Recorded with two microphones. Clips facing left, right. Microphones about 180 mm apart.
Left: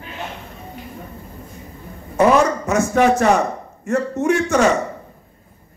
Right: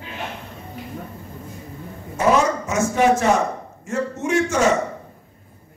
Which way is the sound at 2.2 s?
60° left (ahead or behind).